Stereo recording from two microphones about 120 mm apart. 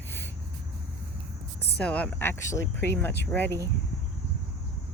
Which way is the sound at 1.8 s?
10° left (ahead or behind).